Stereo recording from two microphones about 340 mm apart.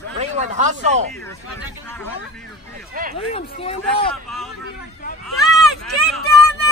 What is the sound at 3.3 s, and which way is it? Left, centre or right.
Speech, centre.